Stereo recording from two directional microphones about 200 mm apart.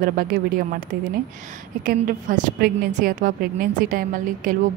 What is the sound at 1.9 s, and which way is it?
A woman's voice, 40° right (ahead or behind).